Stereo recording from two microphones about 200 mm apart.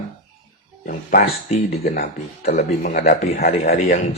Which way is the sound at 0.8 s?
45° left (ahead or behind).